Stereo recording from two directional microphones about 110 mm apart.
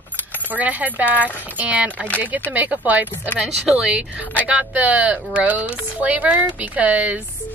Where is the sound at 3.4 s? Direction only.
10° right (ahead or behind).